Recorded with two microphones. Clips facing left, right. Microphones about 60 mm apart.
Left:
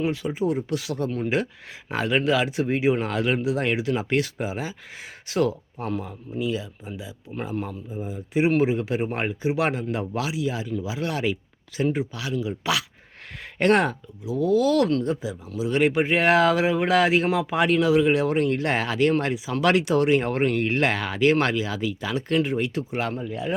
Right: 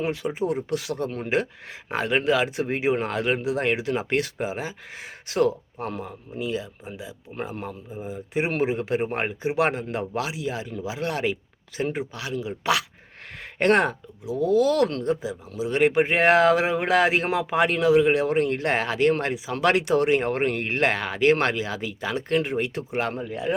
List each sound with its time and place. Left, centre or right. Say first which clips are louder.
0.0 s speech: left 1 dB; right